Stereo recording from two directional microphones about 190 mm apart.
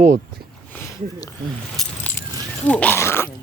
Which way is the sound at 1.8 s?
Centre (ahead or behind).